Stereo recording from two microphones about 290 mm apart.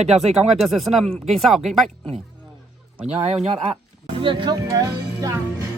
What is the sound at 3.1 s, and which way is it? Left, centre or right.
Speech, right.